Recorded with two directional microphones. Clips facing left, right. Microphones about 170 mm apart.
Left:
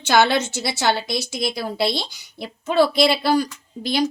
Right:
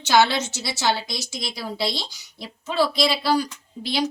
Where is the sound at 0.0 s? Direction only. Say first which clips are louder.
Left 2 dB; 55° left (ahead or behind).